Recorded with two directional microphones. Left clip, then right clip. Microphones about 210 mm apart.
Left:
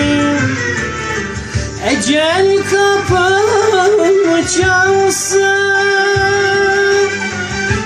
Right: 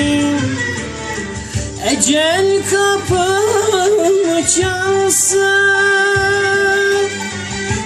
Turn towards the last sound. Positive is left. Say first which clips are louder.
# left 1 dB
turn(degrees=-15)  # may be behind; listen again after turning